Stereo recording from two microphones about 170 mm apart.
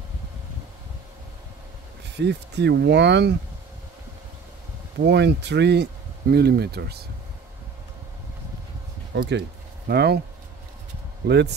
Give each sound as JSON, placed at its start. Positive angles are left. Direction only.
{"t": 2.1, "sound": "speech", "side_deg": -85}
{"t": 5.0, "sound": "speech", "side_deg": -90}
{"t": 9.1, "sound": "speech", "side_deg": -85}
{"t": 9.8, "sound": "speech", "side_deg": -70}
{"t": 11.2, "sound": "speech", "side_deg": -75}